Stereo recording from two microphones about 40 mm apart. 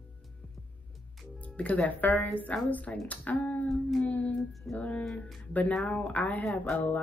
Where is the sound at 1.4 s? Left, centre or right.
Left.